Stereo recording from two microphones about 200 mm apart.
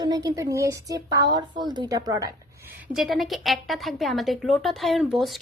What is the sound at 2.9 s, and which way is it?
Speech, centre (ahead or behind).